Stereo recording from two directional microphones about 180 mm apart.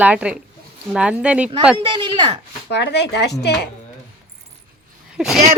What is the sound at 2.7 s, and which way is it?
Speech, 70° left (ahead or behind).